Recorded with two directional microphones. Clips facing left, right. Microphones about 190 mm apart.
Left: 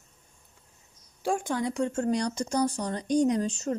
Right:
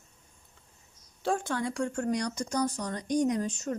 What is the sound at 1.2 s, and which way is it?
Speech, 15° left (ahead or behind).